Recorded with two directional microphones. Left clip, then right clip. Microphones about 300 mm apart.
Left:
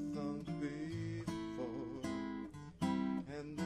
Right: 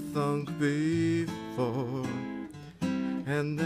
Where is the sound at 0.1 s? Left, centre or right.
Right.